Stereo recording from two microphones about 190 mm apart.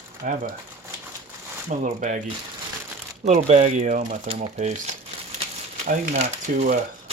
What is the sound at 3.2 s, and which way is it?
Speech, 35° right (ahead or behind).